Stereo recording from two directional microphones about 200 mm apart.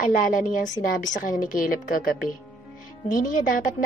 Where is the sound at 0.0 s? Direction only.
40° left (ahead or behind).